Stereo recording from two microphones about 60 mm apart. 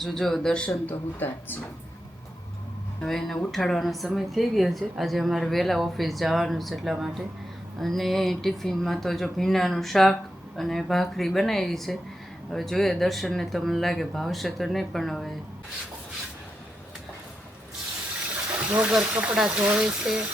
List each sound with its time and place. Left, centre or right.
0.0 s speech: centre
0.9 s speech: left
3.0 s a woman's voice: centre
6.9 s speech: centre
7.8 s a woman's voice: centre
18.8 s speech: centre
19.8 s speech: centre